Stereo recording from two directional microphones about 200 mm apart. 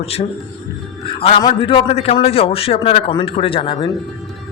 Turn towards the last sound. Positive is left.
turn(degrees=25)  # may be behind; listen again after turning